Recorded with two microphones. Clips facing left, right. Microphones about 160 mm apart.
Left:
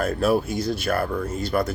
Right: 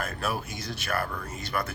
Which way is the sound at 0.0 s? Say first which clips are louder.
Left 11 dB; 35° left (ahead or behind).